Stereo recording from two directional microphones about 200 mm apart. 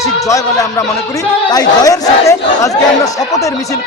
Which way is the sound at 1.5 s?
20° left (ahead or behind).